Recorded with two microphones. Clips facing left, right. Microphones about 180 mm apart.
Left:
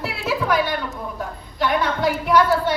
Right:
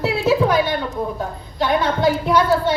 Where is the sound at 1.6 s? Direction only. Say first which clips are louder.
Right 2 dB; 30° right (ahead or behind).